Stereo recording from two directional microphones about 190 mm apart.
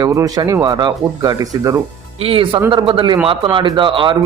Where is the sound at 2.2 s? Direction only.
30° right (ahead or behind).